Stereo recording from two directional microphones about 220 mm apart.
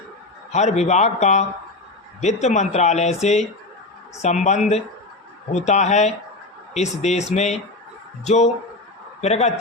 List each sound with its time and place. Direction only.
0.5 s a man's voice: 30° left (ahead or behind)